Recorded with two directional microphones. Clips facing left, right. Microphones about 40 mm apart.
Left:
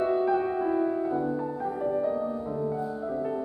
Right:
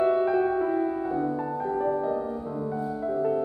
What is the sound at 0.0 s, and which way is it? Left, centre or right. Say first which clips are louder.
Music: right 2 dB; right.